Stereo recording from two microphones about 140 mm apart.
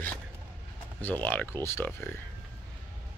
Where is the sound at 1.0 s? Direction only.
10° left (ahead or behind).